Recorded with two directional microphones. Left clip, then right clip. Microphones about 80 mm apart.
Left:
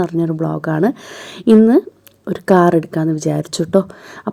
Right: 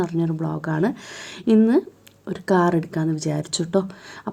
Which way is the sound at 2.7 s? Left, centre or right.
Left.